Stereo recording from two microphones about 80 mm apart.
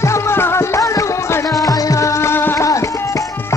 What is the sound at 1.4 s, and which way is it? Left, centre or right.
Music, left.